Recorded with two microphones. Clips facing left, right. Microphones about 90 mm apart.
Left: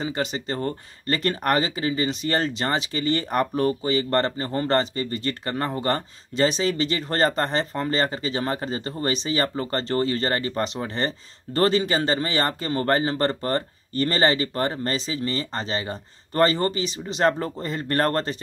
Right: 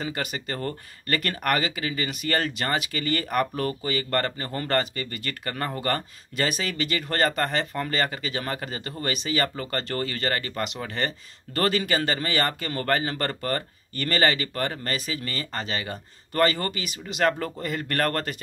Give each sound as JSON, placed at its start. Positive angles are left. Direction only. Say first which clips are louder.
{"t": 0.0, "sound": "speech", "louder": "left 4 dB", "side_deg": 25}